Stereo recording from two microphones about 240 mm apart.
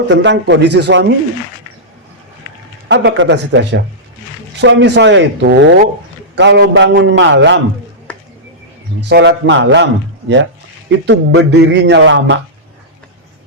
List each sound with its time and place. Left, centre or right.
0.1 s speech: right
2.9 s speech: right
9.0 s speech: right